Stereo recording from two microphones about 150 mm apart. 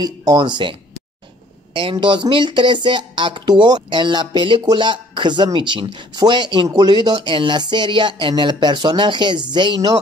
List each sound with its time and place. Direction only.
0.0 s speech: 25° right (ahead or behind)